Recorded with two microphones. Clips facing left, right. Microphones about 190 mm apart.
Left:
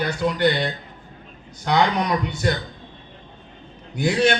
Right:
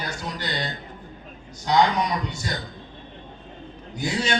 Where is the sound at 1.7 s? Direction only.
65° left (ahead or behind).